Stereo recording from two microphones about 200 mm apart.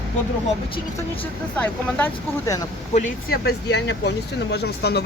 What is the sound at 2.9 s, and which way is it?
Speech, 45° left (ahead or behind).